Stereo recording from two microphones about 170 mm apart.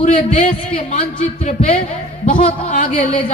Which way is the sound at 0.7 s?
35° left (ahead or behind).